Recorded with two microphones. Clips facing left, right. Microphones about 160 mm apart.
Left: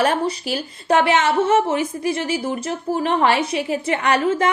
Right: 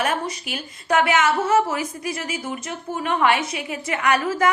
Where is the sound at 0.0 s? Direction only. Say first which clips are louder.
Left 5 dB; 30° left (ahead or behind).